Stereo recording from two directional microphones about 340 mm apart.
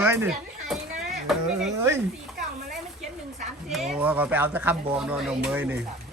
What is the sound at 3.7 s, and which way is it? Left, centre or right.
Speech, centre.